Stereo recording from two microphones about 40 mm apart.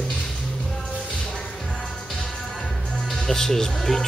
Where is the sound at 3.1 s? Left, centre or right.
Centre.